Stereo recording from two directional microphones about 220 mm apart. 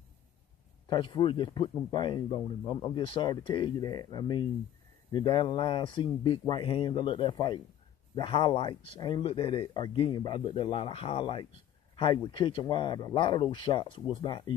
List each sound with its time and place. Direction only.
0.8 s speech: 20° left (ahead or behind)